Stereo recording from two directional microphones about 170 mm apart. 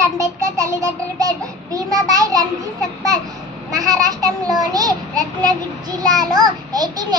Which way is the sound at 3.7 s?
20° right (ahead or behind).